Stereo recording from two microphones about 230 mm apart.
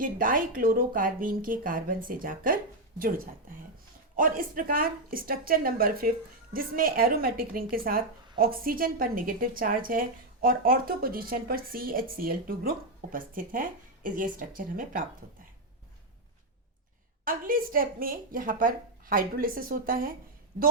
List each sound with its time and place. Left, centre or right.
0.0 s speech: right
4.2 s speech: right
17.2 s speech: right